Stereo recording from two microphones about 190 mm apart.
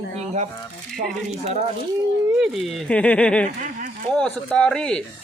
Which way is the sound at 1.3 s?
35° right (ahead or behind).